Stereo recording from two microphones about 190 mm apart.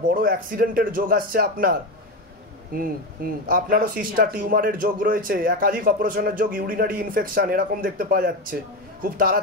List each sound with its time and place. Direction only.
0.1 s speech: 50° right (ahead or behind)